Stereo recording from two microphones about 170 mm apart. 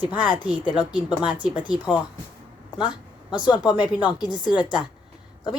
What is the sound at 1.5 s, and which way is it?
Speech, 25° left (ahead or behind).